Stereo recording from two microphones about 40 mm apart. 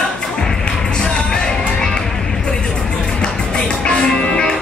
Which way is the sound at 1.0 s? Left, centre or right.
Centre.